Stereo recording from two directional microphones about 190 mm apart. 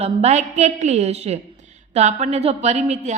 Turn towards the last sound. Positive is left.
turn(degrees=-40)  # may be behind; listen again after turning